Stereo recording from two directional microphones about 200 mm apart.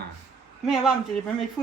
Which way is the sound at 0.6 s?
Centre (ahead or behind).